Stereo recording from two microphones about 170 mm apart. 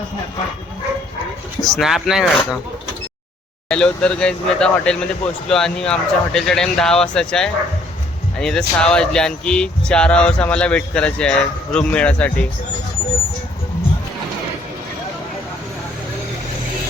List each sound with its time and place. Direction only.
1.6 s speech: centre (ahead or behind)
3.7 s speech: 5° left (ahead or behind)